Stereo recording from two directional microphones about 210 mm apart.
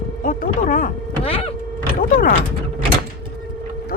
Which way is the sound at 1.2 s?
25° left (ahead or behind).